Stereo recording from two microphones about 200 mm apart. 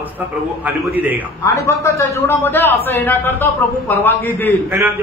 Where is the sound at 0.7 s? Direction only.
10° right (ahead or behind).